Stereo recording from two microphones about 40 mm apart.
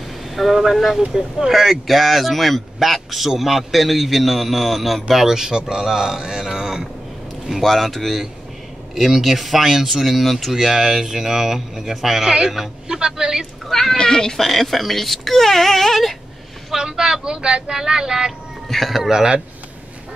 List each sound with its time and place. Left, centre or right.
0.3 s speech: centre
7.6 s speech: centre
12.2 s a man's voice: centre
13.7 s speech: centre
14.4 s speech: centre
16.7 s speech: centre
18.7 s speech: centre
19.0 s speech: centre